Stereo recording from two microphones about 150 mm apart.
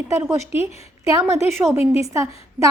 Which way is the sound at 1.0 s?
20° right (ahead or behind).